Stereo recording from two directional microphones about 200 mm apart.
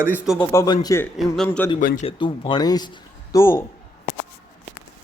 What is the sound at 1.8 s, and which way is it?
Speech, 45° left (ahead or behind).